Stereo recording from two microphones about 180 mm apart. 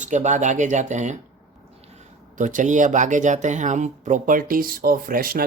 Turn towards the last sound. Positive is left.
turn(degrees=-55)  # may be behind; listen again after turning